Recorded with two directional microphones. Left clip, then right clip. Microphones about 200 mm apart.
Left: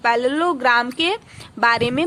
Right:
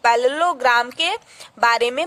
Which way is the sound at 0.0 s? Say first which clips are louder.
Right 2 dB; 30° right (ahead or behind).